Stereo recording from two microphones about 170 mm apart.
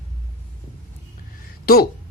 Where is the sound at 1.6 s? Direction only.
60° left (ahead or behind).